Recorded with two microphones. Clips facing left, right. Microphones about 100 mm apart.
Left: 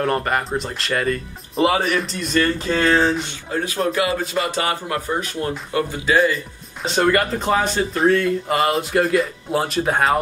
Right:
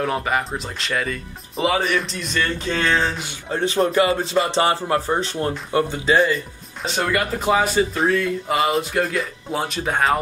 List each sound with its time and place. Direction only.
0.0 s speech: centre (ahead or behind)
3.5 s speech: 25° right (ahead or behind)
6.1 s speech: centre (ahead or behind)